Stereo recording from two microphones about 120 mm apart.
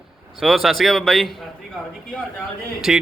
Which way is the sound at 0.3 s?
Centre (ahead or behind).